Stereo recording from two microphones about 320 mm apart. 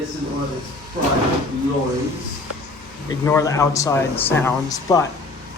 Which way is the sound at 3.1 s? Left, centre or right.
Centre.